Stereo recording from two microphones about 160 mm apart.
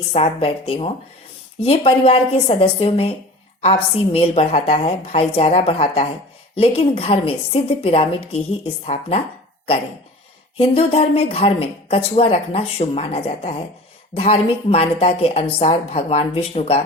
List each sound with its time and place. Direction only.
0.1 s a woman's voice: 35° left (ahead or behind)
10.6 s a woman's voice: 40° left (ahead or behind)